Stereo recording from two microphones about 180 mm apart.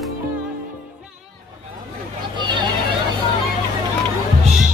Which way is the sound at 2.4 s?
25° right (ahead or behind).